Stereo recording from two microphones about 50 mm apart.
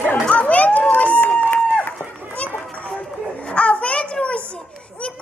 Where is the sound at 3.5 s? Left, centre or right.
Left.